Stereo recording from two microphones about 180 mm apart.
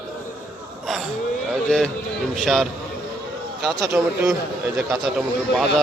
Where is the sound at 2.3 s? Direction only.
Centre (ahead or behind).